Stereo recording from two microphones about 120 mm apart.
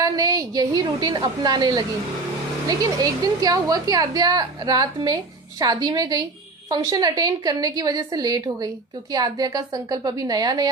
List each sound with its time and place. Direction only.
0.0 s a woman's voice: 30° right (ahead or behind)